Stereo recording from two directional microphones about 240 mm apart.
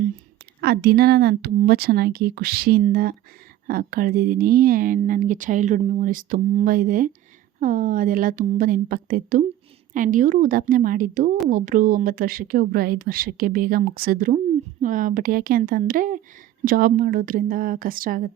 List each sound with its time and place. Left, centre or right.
0.6 s speech: right